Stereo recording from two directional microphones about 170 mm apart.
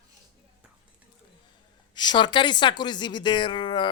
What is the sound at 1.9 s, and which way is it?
A woman's voice, 25° left (ahead or behind).